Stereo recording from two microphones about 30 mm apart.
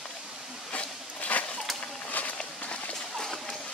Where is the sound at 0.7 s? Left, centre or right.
Left.